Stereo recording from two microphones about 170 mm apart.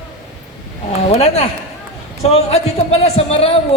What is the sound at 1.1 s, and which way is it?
A woman's voice, 35° left (ahead or behind).